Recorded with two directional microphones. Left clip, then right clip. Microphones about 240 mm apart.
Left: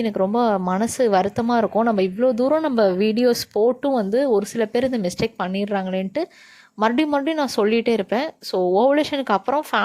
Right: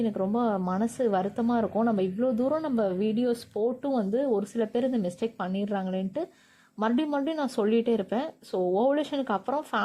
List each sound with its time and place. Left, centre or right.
0.0 s speech: left